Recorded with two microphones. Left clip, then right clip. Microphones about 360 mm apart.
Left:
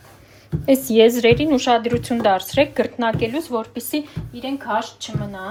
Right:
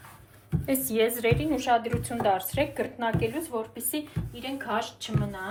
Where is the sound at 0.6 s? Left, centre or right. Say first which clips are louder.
Left 12 dB; centre.